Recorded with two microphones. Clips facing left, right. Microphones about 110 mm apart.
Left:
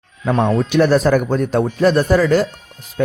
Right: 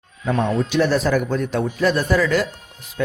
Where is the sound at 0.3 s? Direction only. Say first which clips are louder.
Left 4 dB; 65° left (ahead or behind).